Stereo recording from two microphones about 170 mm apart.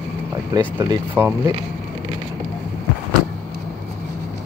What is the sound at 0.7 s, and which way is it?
Speech, 25° right (ahead or behind).